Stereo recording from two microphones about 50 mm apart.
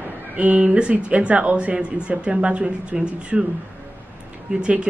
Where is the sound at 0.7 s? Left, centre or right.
Right.